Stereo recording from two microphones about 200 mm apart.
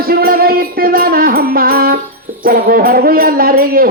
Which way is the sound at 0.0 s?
50° right (ahead or behind).